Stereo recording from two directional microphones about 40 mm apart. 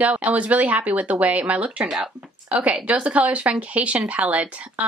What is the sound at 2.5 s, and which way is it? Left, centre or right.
Speech, right.